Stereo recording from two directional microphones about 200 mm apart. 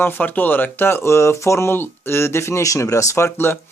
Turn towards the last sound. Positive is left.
turn(degrees=10)  # may be behind; listen again after turning